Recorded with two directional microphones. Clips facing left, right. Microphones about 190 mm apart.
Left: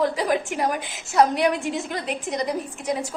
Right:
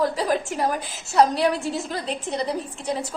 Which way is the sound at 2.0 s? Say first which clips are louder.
Even; 35° right (ahead or behind).